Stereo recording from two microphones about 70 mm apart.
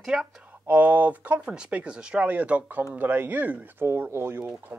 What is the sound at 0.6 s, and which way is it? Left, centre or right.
Speech, right.